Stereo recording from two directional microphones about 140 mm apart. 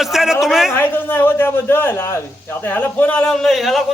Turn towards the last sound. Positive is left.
turn(degrees=0)  # may be behind; listen again after turning